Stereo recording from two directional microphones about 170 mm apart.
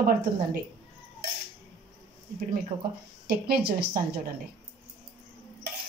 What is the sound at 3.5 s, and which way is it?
Speech, 65° right (ahead or behind).